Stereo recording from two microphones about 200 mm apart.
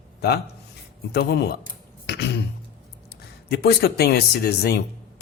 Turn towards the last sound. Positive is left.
turn(degrees=55)  # may be behind; listen again after turning